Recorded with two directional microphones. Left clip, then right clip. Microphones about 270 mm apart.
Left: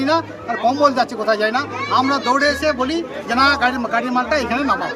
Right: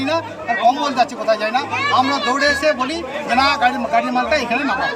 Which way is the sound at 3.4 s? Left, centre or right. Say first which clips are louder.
Left 1 dB; centre.